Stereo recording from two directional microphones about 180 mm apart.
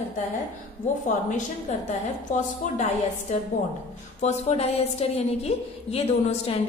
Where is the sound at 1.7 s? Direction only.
40° left (ahead or behind).